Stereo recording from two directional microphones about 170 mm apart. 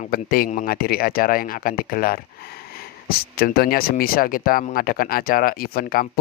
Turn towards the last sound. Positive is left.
turn(degrees=60)  # may be behind; listen again after turning